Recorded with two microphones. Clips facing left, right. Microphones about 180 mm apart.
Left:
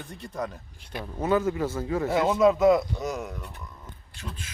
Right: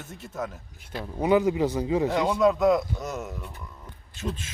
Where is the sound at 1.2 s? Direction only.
15° right (ahead or behind).